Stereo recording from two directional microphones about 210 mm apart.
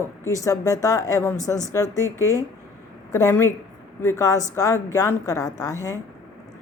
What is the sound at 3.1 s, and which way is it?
Speech, 15° left (ahead or behind).